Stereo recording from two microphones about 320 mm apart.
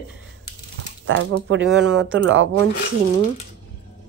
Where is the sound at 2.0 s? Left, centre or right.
Right.